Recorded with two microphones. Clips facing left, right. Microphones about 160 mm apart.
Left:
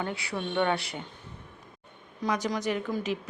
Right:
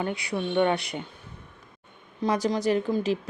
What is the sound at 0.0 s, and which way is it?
Speech, 20° right (ahead or behind).